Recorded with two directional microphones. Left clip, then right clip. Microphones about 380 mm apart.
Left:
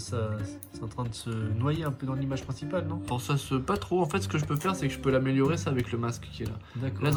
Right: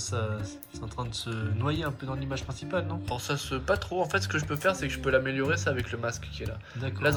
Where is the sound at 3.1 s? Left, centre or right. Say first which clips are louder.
Left 1 dB; centre.